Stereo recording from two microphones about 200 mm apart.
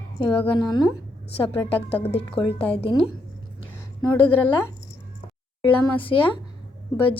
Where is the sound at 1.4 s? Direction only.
30° left (ahead or behind).